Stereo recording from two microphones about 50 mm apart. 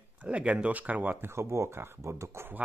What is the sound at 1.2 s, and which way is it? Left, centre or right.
Speech, right.